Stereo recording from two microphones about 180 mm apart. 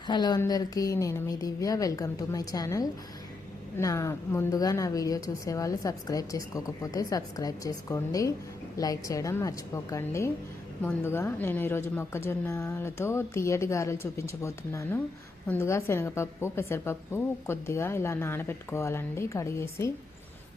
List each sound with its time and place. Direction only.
0.1 s a woman's voice: 20° left (ahead or behind)